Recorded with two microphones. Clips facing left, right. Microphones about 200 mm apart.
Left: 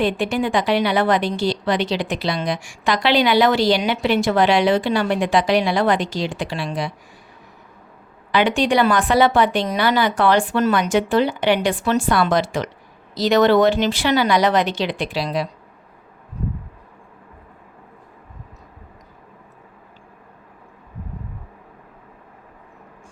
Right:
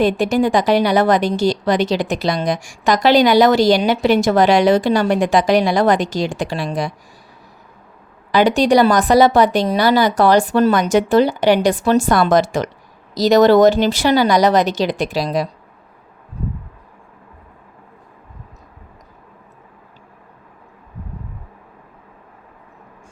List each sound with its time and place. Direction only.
0.0 s a woman's voice: 40° right (ahead or behind)
8.3 s a woman's voice: 40° right (ahead or behind)